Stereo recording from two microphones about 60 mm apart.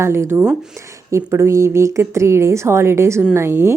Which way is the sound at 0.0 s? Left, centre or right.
Right.